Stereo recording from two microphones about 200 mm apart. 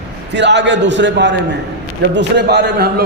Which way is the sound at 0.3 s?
60° right (ahead or behind).